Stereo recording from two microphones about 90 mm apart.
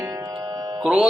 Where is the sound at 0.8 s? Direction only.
10° right (ahead or behind).